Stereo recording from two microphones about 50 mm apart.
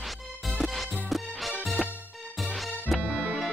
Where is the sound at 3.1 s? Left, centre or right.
Centre.